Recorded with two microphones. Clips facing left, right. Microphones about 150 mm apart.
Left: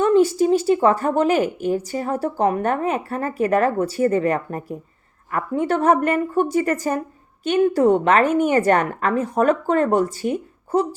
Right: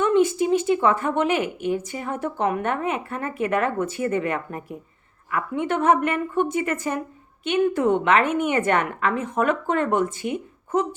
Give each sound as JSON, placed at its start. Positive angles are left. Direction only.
{"t": 0.0, "sound": "a woman's voice", "side_deg": 35}